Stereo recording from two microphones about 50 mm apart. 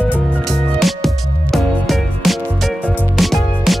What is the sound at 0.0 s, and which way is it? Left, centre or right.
Music, centre.